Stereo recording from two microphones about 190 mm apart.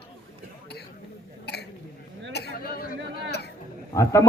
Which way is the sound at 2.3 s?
55° left (ahead or behind).